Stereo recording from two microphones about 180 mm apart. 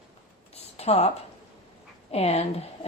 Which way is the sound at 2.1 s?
35° left (ahead or behind).